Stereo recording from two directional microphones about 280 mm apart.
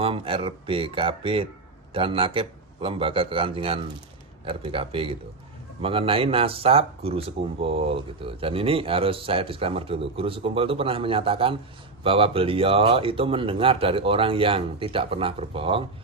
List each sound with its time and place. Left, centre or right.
0.0 s speech: centre